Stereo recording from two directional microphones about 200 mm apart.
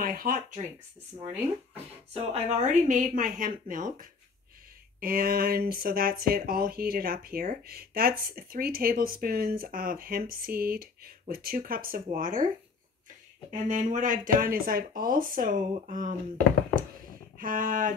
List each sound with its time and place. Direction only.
0.0 s speech: 45° right (ahead or behind)
2.1 s speech: 35° right (ahead or behind)
13.5 s speech: 40° right (ahead or behind)
17.4 s speech: 45° right (ahead or behind)